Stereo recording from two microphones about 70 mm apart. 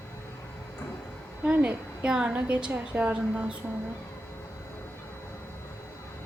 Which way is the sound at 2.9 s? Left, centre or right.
Right.